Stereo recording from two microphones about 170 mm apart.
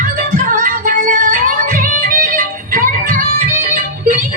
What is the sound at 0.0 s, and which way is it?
Music, 55° right (ahead or behind).